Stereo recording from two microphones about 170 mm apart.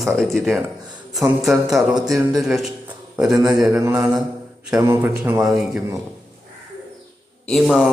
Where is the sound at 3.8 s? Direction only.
10° right (ahead or behind).